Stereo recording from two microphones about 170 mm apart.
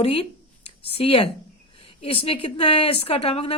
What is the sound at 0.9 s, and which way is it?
A woman's voice, 35° left (ahead or behind).